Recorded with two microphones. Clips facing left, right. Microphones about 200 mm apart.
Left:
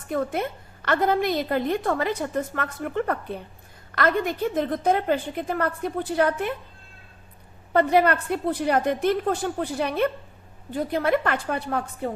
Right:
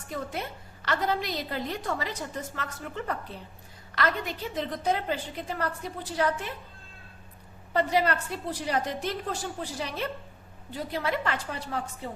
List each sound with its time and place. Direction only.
0.1 s a woman's voice: 55° left (ahead or behind)
7.7 s a woman's voice: 55° left (ahead or behind)